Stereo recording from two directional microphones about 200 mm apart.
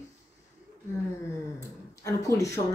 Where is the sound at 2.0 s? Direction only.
15° left (ahead or behind).